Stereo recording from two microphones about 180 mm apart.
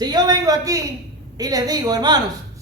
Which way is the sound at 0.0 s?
20° right (ahead or behind).